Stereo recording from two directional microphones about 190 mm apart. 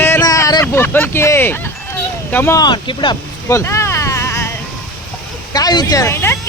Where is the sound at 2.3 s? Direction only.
15° left (ahead or behind).